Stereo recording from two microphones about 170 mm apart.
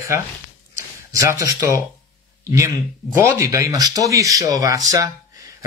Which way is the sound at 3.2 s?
15° right (ahead or behind).